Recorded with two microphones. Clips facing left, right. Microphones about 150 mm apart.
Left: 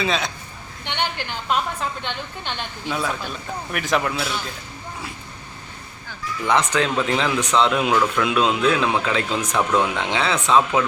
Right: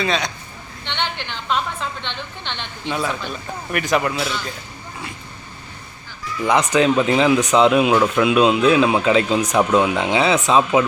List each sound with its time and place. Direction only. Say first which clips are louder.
0.0 s speech: right 2 dB; centre (ahead or behind)
1.3 s a woman's voice: even; 5° left (ahead or behind)
6.5 s speech: right 4 dB; 15° right (ahead or behind)